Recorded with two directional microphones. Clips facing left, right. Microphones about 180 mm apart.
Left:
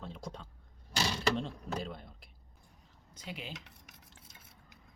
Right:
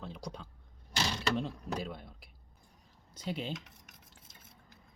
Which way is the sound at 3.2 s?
30° right (ahead or behind).